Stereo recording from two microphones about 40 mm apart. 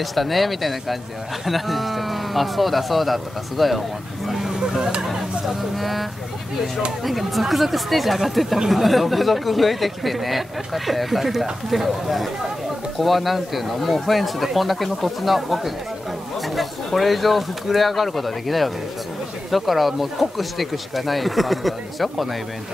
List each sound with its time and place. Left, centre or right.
0.0 s speech: centre
5.5 s speech: centre